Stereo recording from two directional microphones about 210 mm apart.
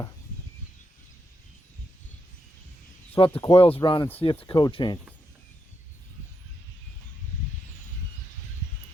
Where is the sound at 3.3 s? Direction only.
25° left (ahead or behind).